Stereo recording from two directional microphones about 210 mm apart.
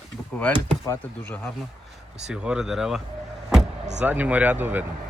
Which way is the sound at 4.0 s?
10° right (ahead or behind).